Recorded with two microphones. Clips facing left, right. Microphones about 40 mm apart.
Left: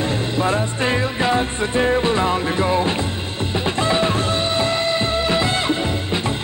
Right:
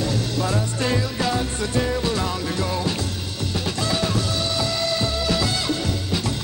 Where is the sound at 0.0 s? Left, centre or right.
Left.